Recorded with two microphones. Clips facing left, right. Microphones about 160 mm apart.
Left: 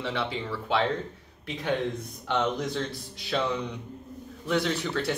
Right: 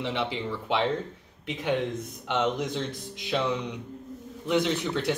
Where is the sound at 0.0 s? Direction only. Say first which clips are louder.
Right 1 dB; 20° right (ahead or behind).